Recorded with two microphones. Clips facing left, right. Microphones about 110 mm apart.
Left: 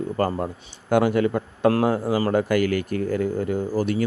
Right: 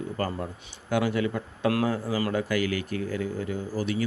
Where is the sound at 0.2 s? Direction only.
45° left (ahead or behind).